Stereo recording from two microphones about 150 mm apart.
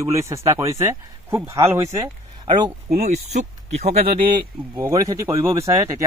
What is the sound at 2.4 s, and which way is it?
Speech, 30° right (ahead or behind).